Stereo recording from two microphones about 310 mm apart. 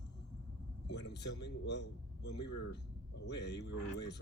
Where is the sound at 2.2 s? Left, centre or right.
Left.